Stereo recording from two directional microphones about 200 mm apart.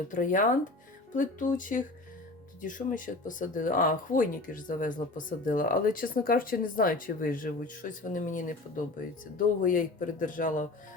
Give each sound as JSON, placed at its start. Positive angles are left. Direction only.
{"t": 0.1, "sound": "speech", "side_deg": 40}